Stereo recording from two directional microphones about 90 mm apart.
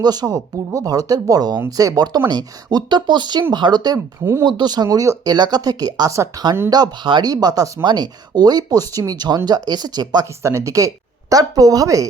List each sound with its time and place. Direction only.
0.0 s speech: 45° right (ahead or behind)
7.9 s speech: 50° right (ahead or behind)
10.4 s speech: 30° right (ahead or behind)